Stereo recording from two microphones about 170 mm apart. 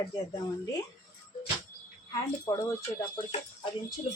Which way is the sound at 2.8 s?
35° left (ahead or behind).